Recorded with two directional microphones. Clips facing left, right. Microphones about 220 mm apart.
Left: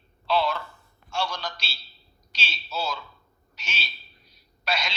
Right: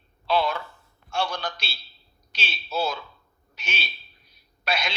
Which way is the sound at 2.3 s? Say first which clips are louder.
Right 4 dB; 55° right (ahead or behind).